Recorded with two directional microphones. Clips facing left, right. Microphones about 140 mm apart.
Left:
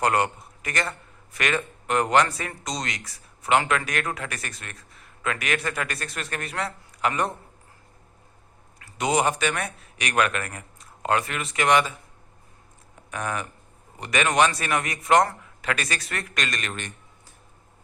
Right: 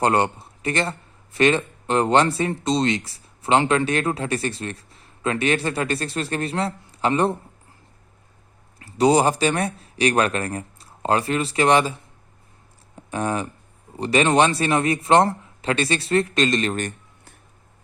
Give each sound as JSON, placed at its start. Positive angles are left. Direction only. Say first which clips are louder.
{"t": 0.0, "sound": "a man's voice", "louder": "right 3 dB", "side_deg": -30}
{"t": 8.8, "sound": "speech", "louder": "right 6 dB", "side_deg": -35}
{"t": 13.0, "sound": "speech", "louder": "right 6 dB", "side_deg": -30}